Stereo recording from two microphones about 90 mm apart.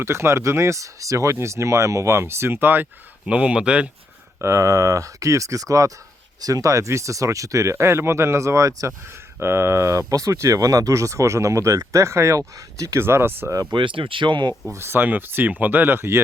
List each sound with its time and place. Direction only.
0.0 s speech: 30° right (ahead or behind)
3.2 s speech: 10° right (ahead or behind)
4.4 s speech: 35° right (ahead or behind)
13.7 s speech: 70° right (ahead or behind)
14.7 s speech: 30° right (ahead or behind)